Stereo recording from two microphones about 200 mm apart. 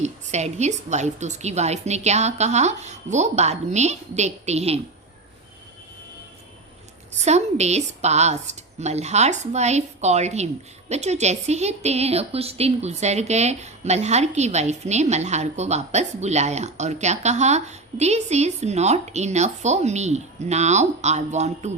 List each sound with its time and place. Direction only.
0.0 s a woman's voice: 35° right (ahead or behind)
7.2 s a woman's voice: 35° right (ahead or behind)